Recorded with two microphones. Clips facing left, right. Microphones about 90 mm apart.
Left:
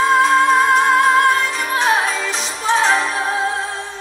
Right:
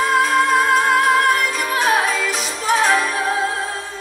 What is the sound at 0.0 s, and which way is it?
Music, 30° left (ahead or behind).